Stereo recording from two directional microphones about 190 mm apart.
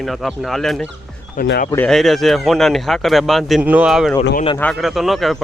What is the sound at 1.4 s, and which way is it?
Speech, 55° left (ahead or behind).